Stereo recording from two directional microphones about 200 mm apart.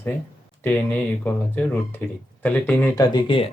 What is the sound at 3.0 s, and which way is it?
Speech, 25° left (ahead or behind).